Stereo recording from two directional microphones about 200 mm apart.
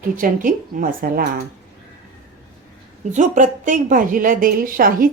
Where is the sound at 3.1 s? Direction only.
40° right (ahead or behind).